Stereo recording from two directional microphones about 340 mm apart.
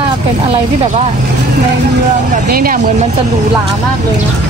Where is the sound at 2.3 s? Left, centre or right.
Right.